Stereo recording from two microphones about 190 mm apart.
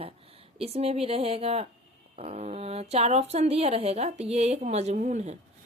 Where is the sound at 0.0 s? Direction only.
30° right (ahead or behind).